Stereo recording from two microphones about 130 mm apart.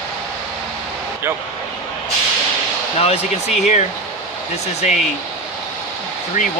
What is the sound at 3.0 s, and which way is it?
Speech, 55° left (ahead or behind).